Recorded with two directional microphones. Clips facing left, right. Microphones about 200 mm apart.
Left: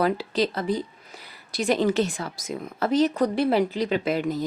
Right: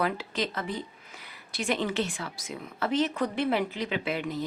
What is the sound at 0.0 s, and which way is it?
A woman's voice, 35° left (ahead or behind).